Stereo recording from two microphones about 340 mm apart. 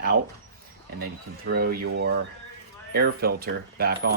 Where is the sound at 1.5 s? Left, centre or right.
Right.